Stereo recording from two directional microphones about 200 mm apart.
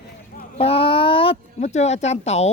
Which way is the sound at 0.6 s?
30° left (ahead or behind).